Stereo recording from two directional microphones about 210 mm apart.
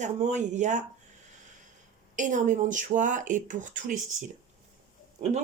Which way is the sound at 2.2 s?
35° right (ahead or behind).